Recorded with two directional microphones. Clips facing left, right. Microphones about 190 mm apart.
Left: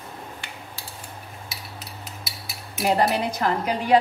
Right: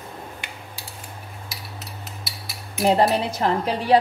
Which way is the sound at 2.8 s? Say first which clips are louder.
Right 3 dB; 25° right (ahead or behind).